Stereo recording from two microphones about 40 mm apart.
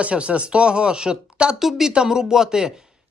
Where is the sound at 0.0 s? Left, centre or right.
Right.